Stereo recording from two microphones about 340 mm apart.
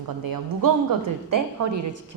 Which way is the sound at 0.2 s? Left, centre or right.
Right.